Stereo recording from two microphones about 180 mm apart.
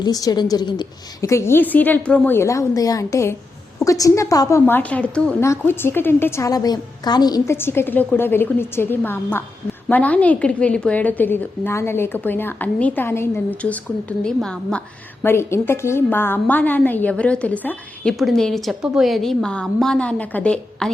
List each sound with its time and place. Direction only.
0.0 s a woman's voice: 20° left (ahead or behind); by 20.9 s 5° left (ahead or behind)